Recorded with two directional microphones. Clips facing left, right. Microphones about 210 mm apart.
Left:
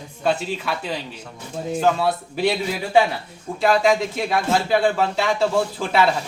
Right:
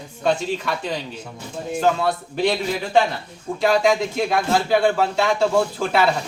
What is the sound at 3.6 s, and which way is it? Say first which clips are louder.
Speech: even; centre (ahead or behind).